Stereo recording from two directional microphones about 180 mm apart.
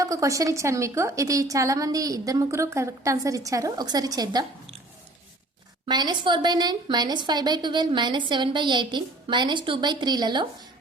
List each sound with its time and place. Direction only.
0.0 s a woman's voice: 20° right (ahead or behind)
5.8 s a woman's voice: 25° right (ahead or behind)